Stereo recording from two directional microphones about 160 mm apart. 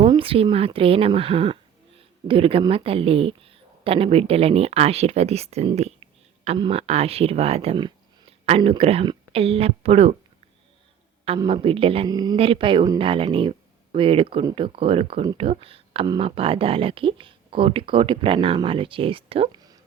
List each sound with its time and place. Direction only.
0.1 s speech: 35° right (ahead or behind)
11.3 s speech: 35° right (ahead or behind)